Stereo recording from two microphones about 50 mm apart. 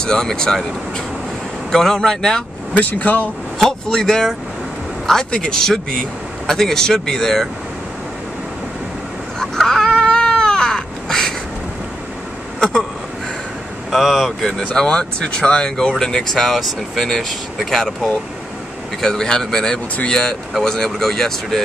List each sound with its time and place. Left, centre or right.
0.0 s speech: centre
1.7 s speech: centre
3.0 s speech: left
3.5 s speech: centre
9.4 s cat: centre
12.5 s vehicle: centre
13.8 s speech: centre
14.6 s speech: centre